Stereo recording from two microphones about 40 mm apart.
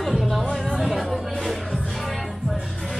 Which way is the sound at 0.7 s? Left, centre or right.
Centre.